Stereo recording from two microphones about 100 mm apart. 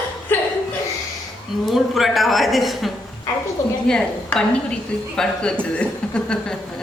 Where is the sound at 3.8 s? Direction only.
5° left (ahead or behind).